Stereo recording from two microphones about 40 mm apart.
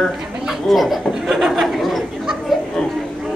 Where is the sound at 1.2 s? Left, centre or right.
Centre.